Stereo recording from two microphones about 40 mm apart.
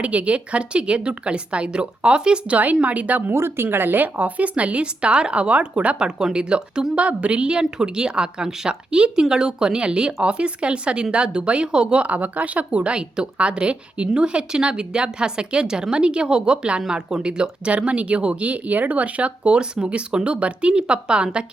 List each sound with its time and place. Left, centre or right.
0.0 s a woman's voice: right
2.8 s speech: right
3.3 s speech: right
6.1 s a woman's voice: centre
12.0 s a woman's voice: right
16.9 s a woman's voice: centre
17.7 s a woman's voice: right